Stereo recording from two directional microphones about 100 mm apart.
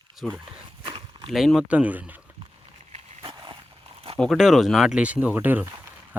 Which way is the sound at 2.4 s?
75° right (ahead or behind).